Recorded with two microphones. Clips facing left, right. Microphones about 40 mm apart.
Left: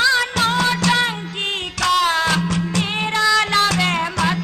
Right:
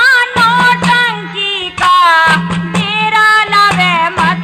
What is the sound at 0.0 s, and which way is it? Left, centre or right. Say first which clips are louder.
Music: right 9 dB; right.